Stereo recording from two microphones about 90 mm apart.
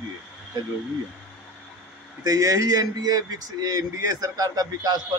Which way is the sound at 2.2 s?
40° right (ahead or behind).